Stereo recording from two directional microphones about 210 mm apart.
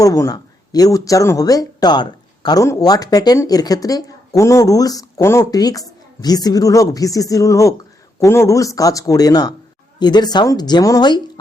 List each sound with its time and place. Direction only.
0.0 s speech: 15° left (ahead or behind)